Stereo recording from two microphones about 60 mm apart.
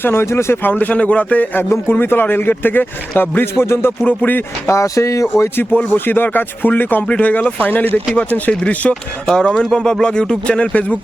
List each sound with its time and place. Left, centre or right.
0.0 s speech: left
0.7 s speech: left
1.9 s a man's voice: left
4.0 s a man's voice: left
4.7 s speech: left
5.9 s speech: left